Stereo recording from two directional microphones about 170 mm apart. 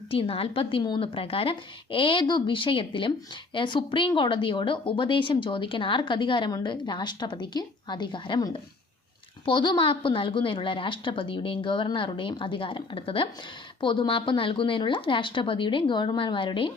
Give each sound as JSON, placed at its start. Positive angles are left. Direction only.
{"t": 0.1, "sound": "speech", "side_deg": 35}